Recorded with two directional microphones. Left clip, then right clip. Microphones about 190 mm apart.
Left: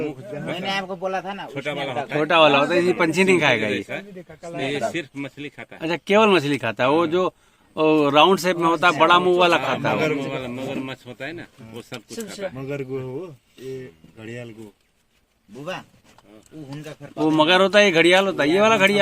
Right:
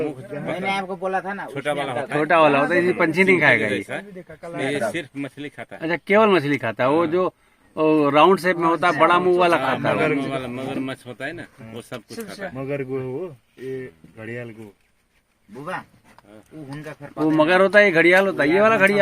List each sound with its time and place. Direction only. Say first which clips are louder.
0.0 s a man's voice: right 2 dB; 50° right (ahead or behind)
0.5 s speech: right 2 dB; 20° right (ahead or behind)
1.5 s speech: right 3 dB; 60° right (ahead or behind)
2.1 s speech: even; centre (ahead or behind)
3.7 s speech: right 1 dB; 60° right (ahead or behind)
5.8 s speech: even; centre (ahead or behind)
10.0 s a man's voice: right 2 dB; 15° right (ahead or behind)
10.2 s speech: right 1 dB; 60° right (ahead or behind)
12.5 s speech: right 2 dB; 20° right (ahead or behind)
15.5 s a man's voice: right 1 dB; 15° right (ahead or behind)
16.6 s speech: right 2 dB; centre (ahead or behind)